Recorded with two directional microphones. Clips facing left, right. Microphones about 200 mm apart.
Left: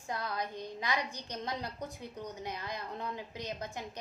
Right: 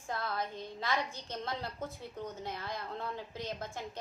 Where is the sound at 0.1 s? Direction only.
15° left (ahead or behind).